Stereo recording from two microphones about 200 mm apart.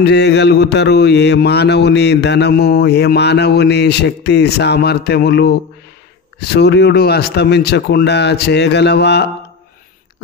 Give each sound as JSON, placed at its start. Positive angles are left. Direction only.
{"t": 0.0, "sound": "speech", "side_deg": 60}